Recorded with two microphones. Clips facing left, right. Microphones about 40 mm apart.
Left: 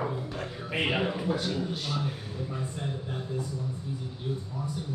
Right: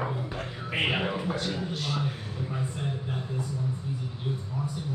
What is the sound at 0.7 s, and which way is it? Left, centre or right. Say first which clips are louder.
Music: right 1 dB; centre.